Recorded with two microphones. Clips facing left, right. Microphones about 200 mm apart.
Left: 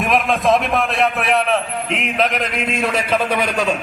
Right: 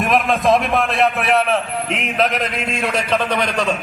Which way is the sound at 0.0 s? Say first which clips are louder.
Right 1 dB; centre (ahead or behind).